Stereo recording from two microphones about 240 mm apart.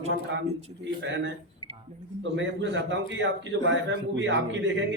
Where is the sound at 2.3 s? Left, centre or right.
Right.